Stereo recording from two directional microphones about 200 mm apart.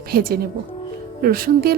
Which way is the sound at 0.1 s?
50° right (ahead or behind).